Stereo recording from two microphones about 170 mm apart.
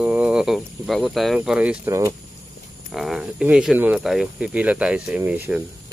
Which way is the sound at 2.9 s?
Centre (ahead or behind).